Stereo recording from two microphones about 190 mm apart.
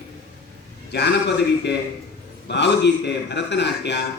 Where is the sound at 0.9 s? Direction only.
60° left (ahead or behind).